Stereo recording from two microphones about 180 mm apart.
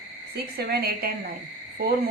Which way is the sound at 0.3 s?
60° right (ahead or behind).